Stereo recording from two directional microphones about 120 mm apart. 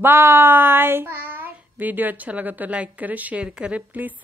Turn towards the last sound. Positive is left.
turn(degrees=-15)  # may be behind; listen again after turning